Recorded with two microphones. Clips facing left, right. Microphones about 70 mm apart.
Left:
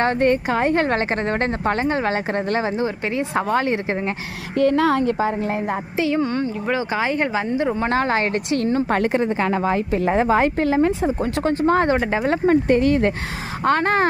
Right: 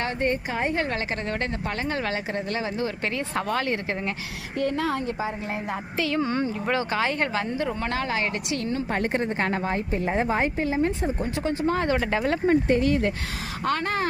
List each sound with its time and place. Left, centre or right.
0.2 s a woman's voice: left
2.1 s speech: left
4.5 s a woman's voice: left
5.4 s speech: left
6.2 s speech: centre
6.7 s speech: centre
7.9 s a woman's voice: left
9.9 s speech: left
11.4 s speech: left
11.9 s speech: left
12.5 s speech: left
13.7 s a woman's voice: left